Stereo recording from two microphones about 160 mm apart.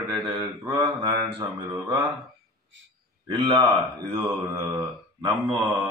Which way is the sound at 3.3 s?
25° right (ahead or behind).